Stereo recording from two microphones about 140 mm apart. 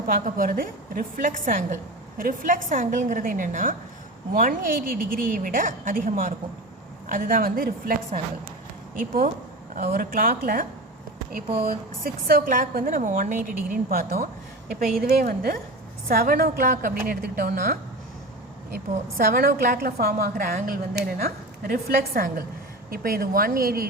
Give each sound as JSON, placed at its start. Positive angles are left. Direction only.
{"t": 0.1, "sound": "a woman's voice", "side_deg": -75}
{"t": 9.0, "sound": "a woman's voice", "side_deg": -70}
{"t": 15.2, "sound": "a woman's voice", "side_deg": -90}
{"t": 16.7, "sound": "a woman's voice", "side_deg": -70}
{"t": 17.1, "sound": "a woman's voice", "side_deg": -90}
{"t": 19.1, "sound": "a woman's voice", "side_deg": -90}